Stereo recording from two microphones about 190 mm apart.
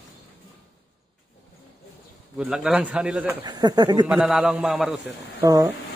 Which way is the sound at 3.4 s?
20° right (ahead or behind).